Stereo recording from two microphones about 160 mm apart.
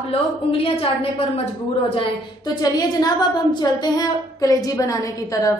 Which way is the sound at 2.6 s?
25° left (ahead or behind).